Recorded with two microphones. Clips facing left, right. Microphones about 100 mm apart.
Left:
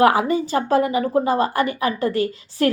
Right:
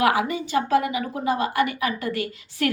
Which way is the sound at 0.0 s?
35° left (ahead or behind).